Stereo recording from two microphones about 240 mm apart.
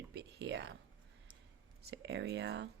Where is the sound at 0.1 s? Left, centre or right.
Right.